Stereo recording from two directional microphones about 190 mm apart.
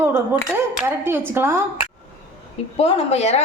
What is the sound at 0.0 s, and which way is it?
A woman's voice, 10° right (ahead or behind).